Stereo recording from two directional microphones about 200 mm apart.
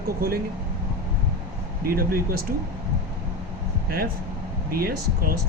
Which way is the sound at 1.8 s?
45° right (ahead or behind).